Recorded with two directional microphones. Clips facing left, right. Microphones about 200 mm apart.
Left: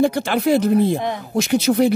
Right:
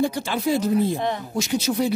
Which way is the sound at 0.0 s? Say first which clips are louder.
Left 5 dB; 70° left (ahead or behind).